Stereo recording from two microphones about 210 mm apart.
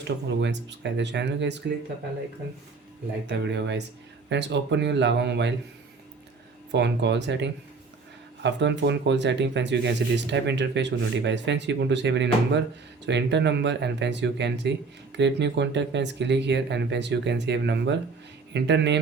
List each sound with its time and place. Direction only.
0.3 s speech: 55° right (ahead or behind)
3.2 s speech: 55° right (ahead or behind)
6.7 s speech: 55° right (ahead or behind)